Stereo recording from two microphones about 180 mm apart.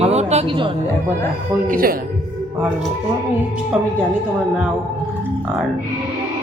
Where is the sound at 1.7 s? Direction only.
55° right (ahead or behind).